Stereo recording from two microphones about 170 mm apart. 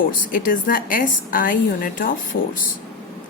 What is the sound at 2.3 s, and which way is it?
Speech, 90° left.